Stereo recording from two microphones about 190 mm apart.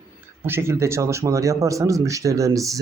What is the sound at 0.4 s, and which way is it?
Speech, 15° right (ahead or behind).